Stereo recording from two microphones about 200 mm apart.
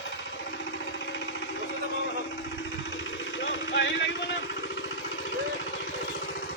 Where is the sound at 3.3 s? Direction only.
60° left (ahead or behind).